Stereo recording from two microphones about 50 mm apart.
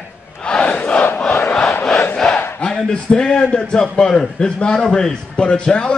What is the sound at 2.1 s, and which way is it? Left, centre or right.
Battle cry, centre.